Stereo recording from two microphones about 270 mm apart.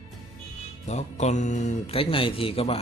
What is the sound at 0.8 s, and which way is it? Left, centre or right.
Speech, left.